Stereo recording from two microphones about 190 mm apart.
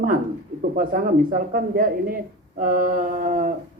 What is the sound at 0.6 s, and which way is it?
Speech, 45° right (ahead or behind).